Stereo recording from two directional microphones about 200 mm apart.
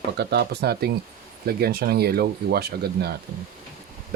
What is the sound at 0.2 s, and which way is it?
Speech, 55° right (ahead or behind).